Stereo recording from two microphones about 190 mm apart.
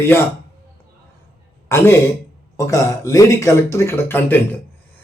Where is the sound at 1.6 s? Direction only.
15° left (ahead or behind).